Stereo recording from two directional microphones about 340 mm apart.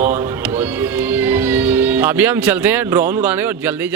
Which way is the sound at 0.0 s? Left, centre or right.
Centre.